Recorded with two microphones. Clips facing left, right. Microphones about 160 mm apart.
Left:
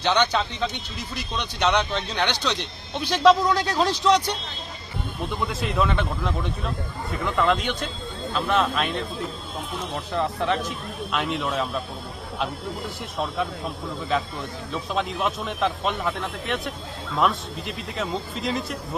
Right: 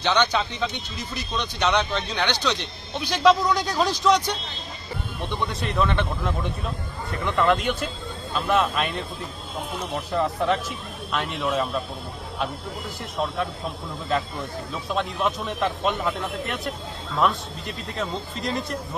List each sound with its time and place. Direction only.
0.0 s speech: 5° left (ahead or behind)
13.1 s speech: centre (ahead or behind)
14.7 s speech: centre (ahead or behind)
17.2 s speech: centre (ahead or behind)